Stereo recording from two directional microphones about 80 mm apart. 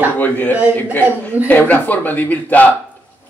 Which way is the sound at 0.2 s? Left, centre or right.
Left.